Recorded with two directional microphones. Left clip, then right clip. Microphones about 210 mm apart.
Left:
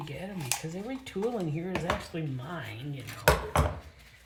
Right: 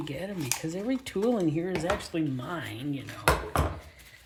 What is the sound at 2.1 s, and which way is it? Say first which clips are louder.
Speech: right 6 dB; 45° right (ahead or behind).